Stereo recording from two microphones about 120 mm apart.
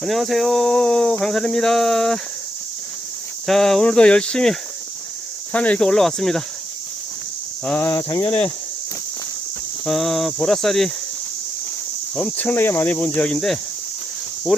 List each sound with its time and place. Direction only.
0.0 s cricket: centre (ahead or behind)
3.4 s cricket: centre (ahead or behind)
5.5 s cricket: 10° left (ahead or behind)
7.6 s speech: 10° left (ahead or behind)
7.9 s speech: 30° left (ahead or behind)
8.3 s speech: 15° left (ahead or behind)
9.8 s cricket: centre (ahead or behind)
12.1 s speech: 10° left (ahead or behind)